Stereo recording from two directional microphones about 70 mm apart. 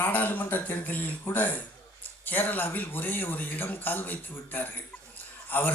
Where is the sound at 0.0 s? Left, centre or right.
Left.